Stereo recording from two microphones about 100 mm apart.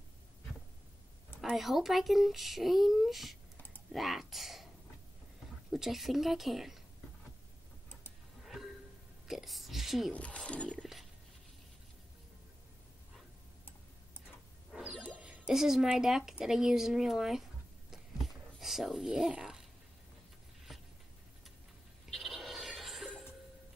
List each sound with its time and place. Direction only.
1.4 s speech: centre (ahead or behind)
3.5 s typing: 20° left (ahead or behind)
3.9 s speech: centre (ahead or behind)
5.7 s speech: 5° right (ahead or behind)
9.3 s speech: centre (ahead or behind)
10.1 s a sound: 10° left (ahead or behind)
14.2 s music: 5° right (ahead or behind)
22.0 s a sound: centre (ahead or behind)